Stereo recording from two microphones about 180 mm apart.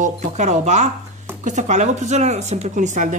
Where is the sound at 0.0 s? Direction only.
40° right (ahead or behind).